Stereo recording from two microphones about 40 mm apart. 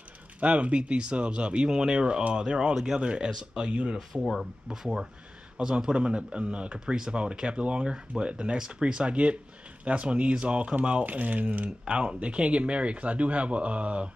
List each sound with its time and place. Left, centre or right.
0.4 s speech: right
2.7 s speech: centre
3.0 s speech: right
4.1 s speech: centre; by 10.8 s right
11.1 s speech: right
11.9 s speech: right